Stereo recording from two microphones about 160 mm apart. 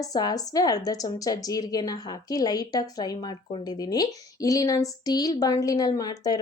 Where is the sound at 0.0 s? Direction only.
25° left (ahead or behind).